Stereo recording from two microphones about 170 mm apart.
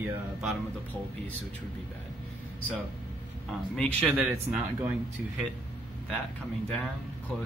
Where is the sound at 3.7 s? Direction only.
5° left (ahead or behind).